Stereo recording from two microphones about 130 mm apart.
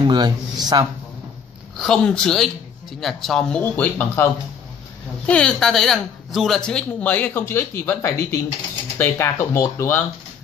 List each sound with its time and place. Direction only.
0.0 s speech: 35° right (ahead or behind)
1.8 s a woman's voice: 5° left (ahead or behind); by 10.0 s 20° left (ahead or behind)